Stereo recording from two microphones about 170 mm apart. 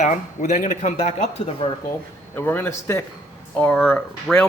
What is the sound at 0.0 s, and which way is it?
Speech, 45° left (ahead or behind).